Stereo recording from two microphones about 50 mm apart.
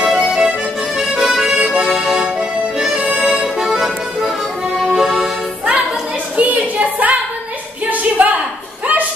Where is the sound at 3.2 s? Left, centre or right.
Centre.